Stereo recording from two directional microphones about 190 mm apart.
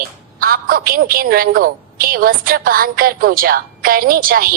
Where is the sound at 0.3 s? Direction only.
50° right (ahead or behind).